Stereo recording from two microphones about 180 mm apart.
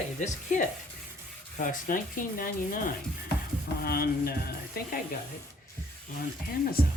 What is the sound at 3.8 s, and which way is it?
Speech, 55° left (ahead or behind).